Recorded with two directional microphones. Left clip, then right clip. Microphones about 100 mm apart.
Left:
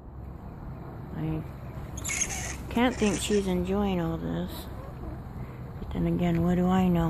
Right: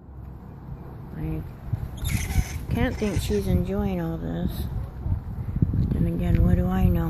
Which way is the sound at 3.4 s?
5° left (ahead or behind).